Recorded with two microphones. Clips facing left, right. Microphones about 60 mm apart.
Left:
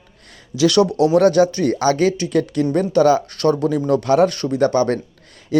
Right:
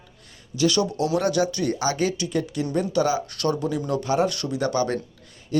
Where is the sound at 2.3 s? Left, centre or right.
Left.